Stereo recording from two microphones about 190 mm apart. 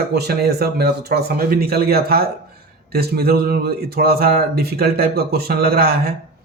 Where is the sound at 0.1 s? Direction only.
55° right (ahead or behind).